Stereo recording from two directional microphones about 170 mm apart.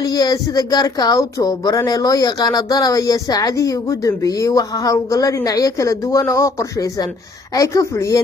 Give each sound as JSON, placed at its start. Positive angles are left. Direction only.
{"t": 0.0, "sound": "speech", "side_deg": 25}